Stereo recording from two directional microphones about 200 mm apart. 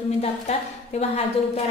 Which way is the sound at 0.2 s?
30° left (ahead or behind).